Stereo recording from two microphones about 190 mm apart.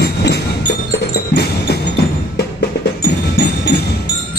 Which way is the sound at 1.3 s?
60° left (ahead or behind).